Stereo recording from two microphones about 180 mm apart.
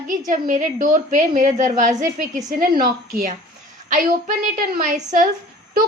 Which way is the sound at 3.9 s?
50° right (ahead or behind).